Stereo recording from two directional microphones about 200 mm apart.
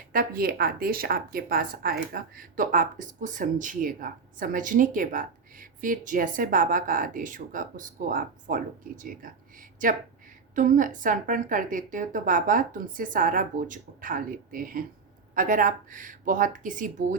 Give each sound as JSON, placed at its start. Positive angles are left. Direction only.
{"t": 0.1, "sound": "a woman's voice", "side_deg": -50}